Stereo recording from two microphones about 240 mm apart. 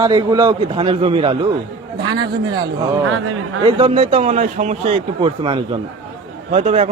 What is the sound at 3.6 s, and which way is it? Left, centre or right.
Speech, right.